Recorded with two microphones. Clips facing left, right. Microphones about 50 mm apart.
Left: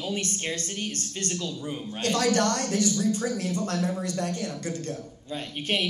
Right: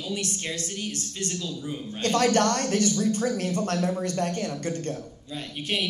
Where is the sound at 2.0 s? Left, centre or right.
Right.